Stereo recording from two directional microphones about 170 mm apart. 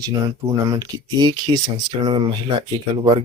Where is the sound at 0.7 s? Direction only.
25° right (ahead or behind).